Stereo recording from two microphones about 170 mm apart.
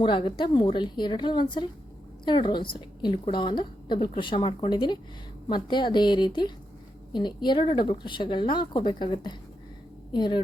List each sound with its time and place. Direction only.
0.0 s a woman's voice: 30° left (ahead or behind)